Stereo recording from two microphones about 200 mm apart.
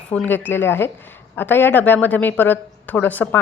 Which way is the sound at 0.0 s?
5° left (ahead or behind).